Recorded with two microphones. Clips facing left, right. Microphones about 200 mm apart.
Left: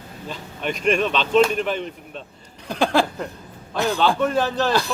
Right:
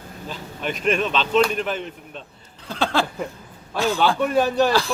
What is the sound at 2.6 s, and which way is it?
Speech, 15° left (ahead or behind).